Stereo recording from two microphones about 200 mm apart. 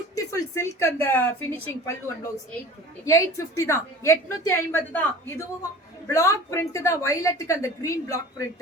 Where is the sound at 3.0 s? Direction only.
15° left (ahead or behind).